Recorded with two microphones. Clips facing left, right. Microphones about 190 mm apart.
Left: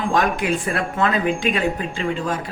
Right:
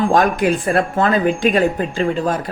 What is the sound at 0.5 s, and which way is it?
Speech, 55° right (ahead or behind).